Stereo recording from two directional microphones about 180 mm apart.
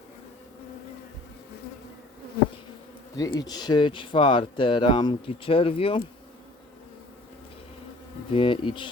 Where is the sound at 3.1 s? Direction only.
20° left (ahead or behind).